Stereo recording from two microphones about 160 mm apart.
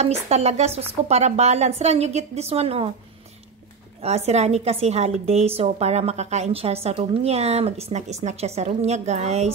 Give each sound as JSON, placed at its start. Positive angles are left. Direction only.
{"t": 0.0, "sound": "a woman's voice", "side_deg": -40}
{"t": 4.0, "sound": "a woman's voice", "side_deg": -40}